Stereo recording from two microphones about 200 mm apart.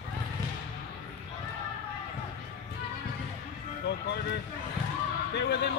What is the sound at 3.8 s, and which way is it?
Speech, 60° left (ahead or behind).